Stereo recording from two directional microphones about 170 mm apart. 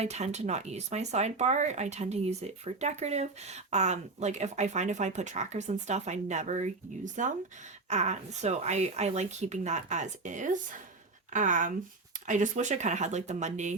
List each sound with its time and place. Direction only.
0.0 s speech: 40° right (ahead or behind)